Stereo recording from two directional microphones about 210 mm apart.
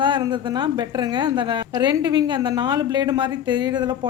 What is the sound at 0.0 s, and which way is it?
A woman's voice, 20° right (ahead or behind).